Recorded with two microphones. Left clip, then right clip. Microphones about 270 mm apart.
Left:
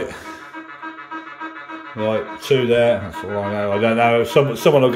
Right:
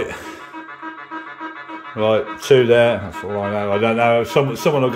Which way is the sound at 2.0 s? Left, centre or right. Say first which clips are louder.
Right 4 dB; centre.